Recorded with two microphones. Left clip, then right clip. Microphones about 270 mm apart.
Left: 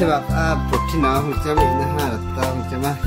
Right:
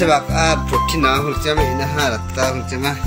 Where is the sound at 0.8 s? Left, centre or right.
Left.